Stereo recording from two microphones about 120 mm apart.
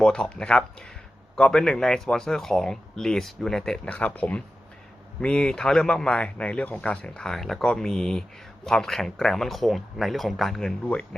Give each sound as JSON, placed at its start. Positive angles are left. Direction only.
{"t": 0.0, "sound": "speech", "side_deg": 5}